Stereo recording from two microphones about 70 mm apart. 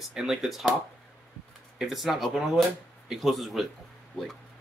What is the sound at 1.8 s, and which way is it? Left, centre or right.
Speech, centre.